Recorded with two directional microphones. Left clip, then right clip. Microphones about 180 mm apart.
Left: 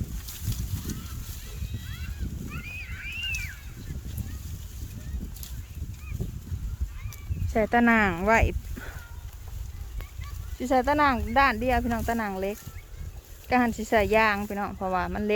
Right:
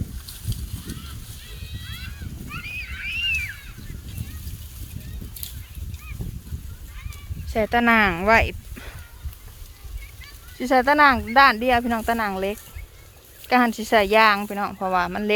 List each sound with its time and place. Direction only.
2.5 s a sound: 50° left (ahead or behind)
7.5 s speech: 10° left (ahead or behind)
10.6 s speech: 10° right (ahead or behind)